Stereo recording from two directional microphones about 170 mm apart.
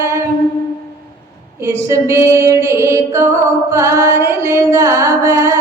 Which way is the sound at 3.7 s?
15° right (ahead or behind).